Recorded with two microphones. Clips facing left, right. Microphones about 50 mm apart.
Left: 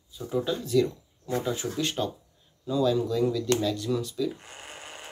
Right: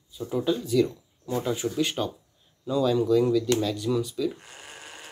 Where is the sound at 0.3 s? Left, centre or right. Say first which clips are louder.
Right 1 dB; centre.